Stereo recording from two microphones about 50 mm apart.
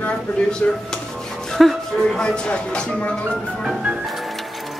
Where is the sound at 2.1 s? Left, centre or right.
Centre.